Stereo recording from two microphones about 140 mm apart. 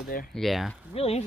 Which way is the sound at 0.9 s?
45° left (ahead or behind).